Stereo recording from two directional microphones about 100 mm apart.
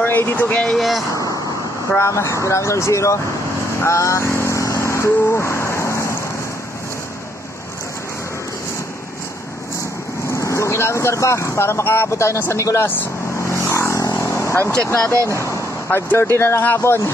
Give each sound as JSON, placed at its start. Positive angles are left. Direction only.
{"t": 0.0, "sound": "speech", "side_deg": 20}
{"t": 0.7, "sound": "speech", "side_deg": 0}
{"t": 2.0, "sound": "speech", "side_deg": 30}
{"t": 3.8, "sound": "vehicle", "side_deg": 30}
{"t": 10.3, "sound": "speech", "side_deg": 30}
{"t": 12.6, "sound": "vehicle", "side_deg": 25}
{"t": 14.9, "sound": "speech", "side_deg": 25}